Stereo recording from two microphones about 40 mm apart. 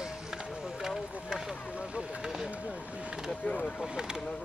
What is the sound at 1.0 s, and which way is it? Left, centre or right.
Run, centre.